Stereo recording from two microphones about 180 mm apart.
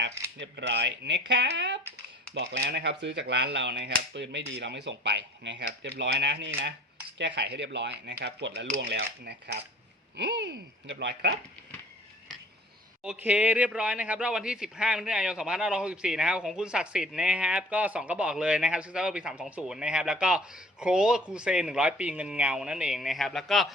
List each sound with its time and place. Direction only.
0.3 s speech: 80° right
13.0 s speech: 5° right (ahead or behind)